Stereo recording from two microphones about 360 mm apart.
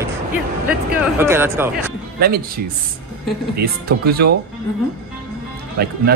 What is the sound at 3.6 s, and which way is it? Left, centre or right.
Speech, right.